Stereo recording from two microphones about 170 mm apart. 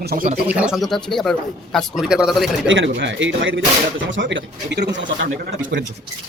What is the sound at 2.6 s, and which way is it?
Speech, 90° right.